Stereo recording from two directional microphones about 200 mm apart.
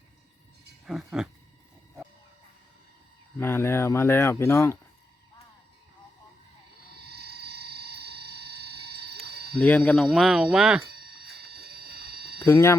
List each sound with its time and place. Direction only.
0.9 s speech: 5° right (ahead or behind)
3.3 s speech: 10° left (ahead or behind)
6.9 s a sound: 55° right (ahead or behind)
9.6 s speech: 5° left (ahead or behind)
11.3 s a sound: 50° right (ahead or behind)
12.5 s speech: 15° left (ahead or behind)